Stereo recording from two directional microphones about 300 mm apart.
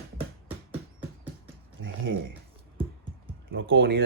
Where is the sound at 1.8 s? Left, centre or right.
Right.